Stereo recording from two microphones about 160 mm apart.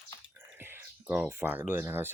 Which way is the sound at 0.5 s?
15° right (ahead or behind).